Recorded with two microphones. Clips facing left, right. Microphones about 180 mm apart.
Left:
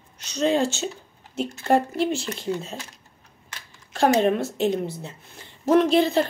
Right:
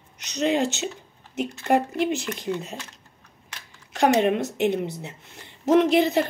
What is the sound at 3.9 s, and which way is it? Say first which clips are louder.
Speech: even; 20° right (ahead or behind).